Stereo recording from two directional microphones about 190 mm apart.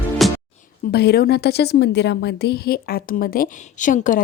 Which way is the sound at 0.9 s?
55° left (ahead or behind).